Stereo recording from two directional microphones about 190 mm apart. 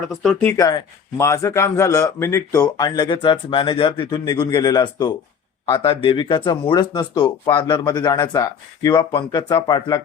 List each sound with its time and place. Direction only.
0.1 s speech: centre (ahead or behind)
0.5 s speech: 15° left (ahead or behind)